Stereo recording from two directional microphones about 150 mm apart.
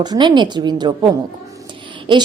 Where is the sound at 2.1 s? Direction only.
30° right (ahead or behind).